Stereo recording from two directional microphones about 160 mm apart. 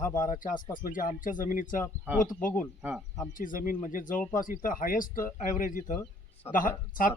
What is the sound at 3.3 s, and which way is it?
Speech, 60° left (ahead or behind).